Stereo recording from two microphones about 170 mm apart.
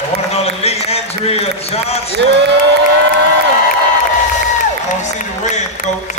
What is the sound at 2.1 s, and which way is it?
Speech, 90° right.